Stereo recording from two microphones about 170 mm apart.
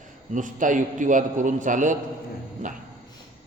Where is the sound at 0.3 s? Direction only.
50° right (ahead or behind).